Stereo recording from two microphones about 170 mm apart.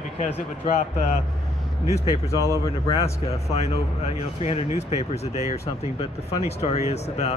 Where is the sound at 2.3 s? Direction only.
20° right (ahead or behind).